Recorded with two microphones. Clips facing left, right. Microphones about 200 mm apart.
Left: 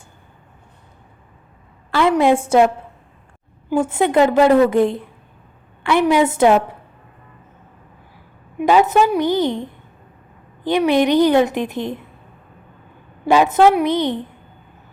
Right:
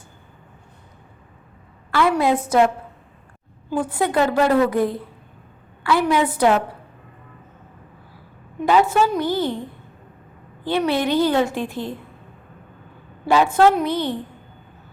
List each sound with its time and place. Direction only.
1.9 s a woman's voice: 20° left (ahead or behind)
3.7 s a woman's voice: 25° left (ahead or behind)
8.5 s a woman's voice: 15° left (ahead or behind)
13.2 s a woman's voice: 20° left (ahead or behind)